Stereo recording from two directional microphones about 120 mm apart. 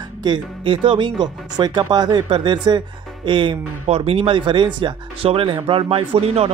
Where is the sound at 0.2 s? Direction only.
40° right (ahead or behind).